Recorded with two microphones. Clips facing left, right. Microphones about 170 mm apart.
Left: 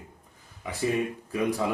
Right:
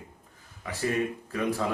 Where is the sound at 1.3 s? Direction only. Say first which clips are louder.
Left 3 dB; 15° left (ahead or behind).